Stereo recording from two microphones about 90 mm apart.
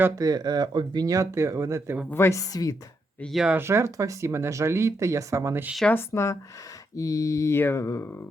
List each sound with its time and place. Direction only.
0.2 s speech: 45° right (ahead or behind)
2.0 s mantra: 25° left (ahead or behind); by 2.7 s 45° left (ahead or behind)
3.6 s speech: 30° right (ahead or behind)
5.9 s speech: 25° left (ahead or behind)
6.9 s mantra: 40° left (ahead or behind)